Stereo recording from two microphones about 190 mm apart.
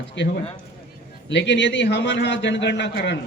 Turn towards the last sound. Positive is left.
turn(degrees=65)  # may be behind; listen again after turning